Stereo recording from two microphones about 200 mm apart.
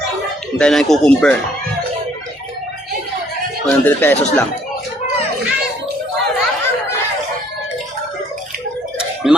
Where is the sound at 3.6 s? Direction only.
10° left (ahead or behind).